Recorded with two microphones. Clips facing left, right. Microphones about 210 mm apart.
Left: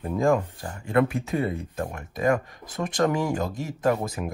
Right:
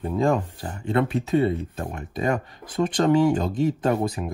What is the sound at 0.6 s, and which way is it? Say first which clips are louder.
Speech: left 1 dB; 25° right (ahead or behind).